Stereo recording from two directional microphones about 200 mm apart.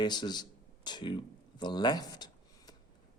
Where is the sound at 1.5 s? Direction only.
20° left (ahead or behind).